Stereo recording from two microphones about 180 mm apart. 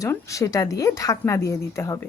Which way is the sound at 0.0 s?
15° left (ahead or behind).